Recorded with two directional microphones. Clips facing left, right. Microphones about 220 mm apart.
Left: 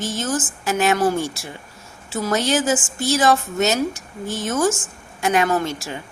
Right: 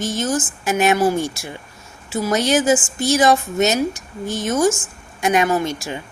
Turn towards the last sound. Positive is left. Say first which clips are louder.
# right 2 dB
turn(degrees=-15)  # may be behind; listen again after turning